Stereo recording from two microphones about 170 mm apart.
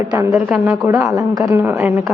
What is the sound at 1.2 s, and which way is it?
Speech, 20° right (ahead or behind).